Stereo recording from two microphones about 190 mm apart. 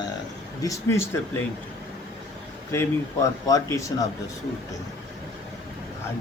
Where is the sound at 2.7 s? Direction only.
15° left (ahead or behind).